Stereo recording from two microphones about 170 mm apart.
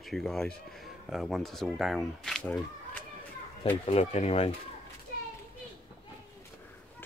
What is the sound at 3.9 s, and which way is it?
Speech, 40° left (ahead or behind).